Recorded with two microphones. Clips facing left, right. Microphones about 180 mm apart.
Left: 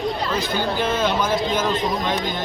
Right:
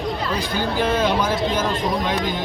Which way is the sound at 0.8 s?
10° right (ahead or behind).